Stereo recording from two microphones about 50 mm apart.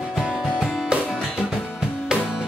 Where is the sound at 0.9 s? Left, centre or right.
Centre.